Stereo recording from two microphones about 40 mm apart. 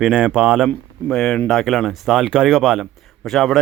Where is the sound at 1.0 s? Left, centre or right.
Centre.